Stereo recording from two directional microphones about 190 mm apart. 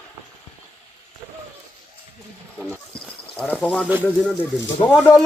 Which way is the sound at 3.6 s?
5° left (ahead or behind).